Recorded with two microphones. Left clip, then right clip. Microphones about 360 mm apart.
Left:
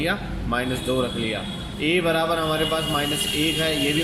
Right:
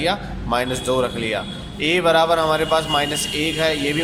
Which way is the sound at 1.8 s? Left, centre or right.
Centre.